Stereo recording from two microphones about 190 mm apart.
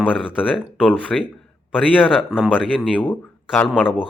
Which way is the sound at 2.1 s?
5° right (ahead or behind).